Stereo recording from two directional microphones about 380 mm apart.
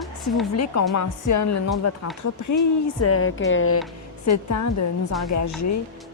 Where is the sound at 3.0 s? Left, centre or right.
Left.